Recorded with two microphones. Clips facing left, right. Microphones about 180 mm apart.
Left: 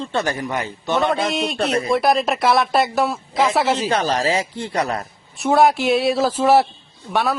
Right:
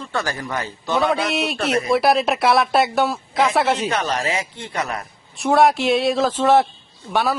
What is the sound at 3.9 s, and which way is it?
Speech, 30° left (ahead or behind).